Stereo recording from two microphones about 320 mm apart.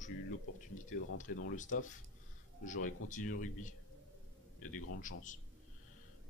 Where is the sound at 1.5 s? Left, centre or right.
Left.